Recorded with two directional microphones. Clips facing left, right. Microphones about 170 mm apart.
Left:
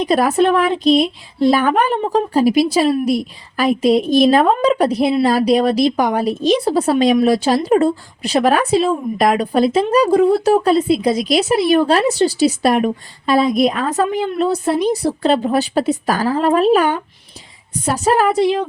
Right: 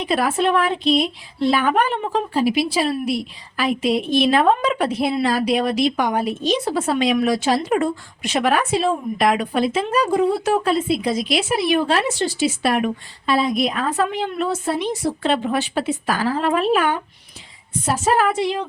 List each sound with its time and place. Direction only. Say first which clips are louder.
0.0 s a woman's voice: left 5 dB; 40° left (ahead or behind)
17.9 s a woman's voice: left 3 dB; 40° left (ahead or behind)